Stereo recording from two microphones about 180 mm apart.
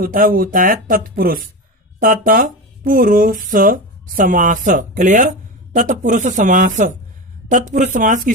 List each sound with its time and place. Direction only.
0.0 s speech: 50° right (ahead or behind)